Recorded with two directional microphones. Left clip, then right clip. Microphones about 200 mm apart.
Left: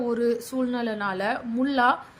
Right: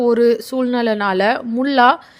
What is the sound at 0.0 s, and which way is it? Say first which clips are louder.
Speech: right 11 dB; 40° right (ahead or behind).